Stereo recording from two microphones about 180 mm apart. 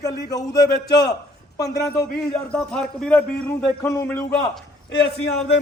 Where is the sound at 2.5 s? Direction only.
5° left (ahead or behind).